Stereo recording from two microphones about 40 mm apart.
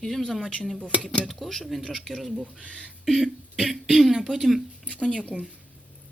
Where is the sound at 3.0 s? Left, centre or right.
Centre.